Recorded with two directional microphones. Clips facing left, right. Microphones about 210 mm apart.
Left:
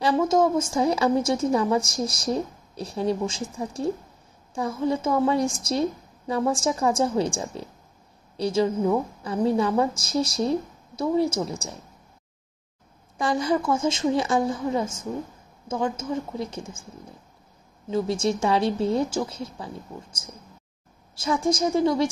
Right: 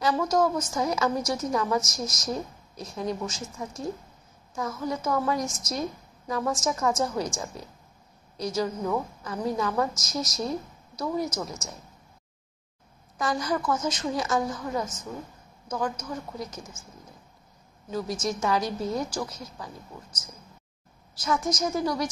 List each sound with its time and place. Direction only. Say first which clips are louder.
0.0 s a woman's voice: left 4 dB; 25° left (ahead or behind)
13.2 s a woman's voice: left 4 dB; 25° left (ahead or behind)
17.8 s a woman's voice: left 6 dB; 25° left (ahead or behind)